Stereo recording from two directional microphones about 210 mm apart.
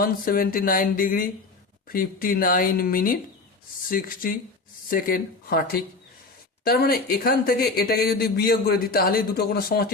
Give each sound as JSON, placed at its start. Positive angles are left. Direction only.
{"t": 0.0, "sound": "speech", "side_deg": 45}